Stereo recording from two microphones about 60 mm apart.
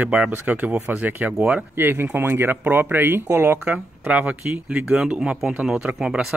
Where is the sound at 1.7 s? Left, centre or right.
Right.